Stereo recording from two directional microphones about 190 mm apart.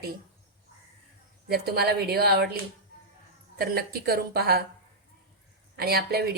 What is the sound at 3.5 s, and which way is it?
A woman's voice, 55° right (ahead or behind).